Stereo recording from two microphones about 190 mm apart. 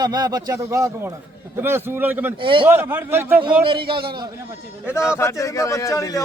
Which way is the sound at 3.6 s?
25° right (ahead or behind).